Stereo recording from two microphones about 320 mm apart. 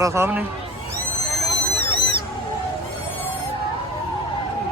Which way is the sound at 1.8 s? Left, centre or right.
Right.